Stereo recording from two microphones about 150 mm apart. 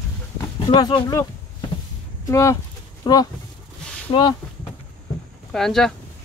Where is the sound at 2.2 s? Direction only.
20° left (ahead or behind).